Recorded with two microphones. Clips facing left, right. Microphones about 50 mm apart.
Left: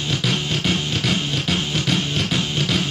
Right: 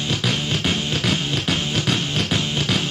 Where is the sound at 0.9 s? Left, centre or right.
Right.